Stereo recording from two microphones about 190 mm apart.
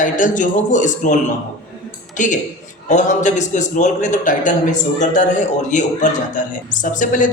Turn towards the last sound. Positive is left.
turn(degrees=45)  # may be behind; listen again after turning